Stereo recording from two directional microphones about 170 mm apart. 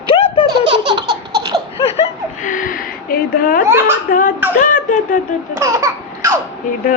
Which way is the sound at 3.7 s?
15° right (ahead or behind).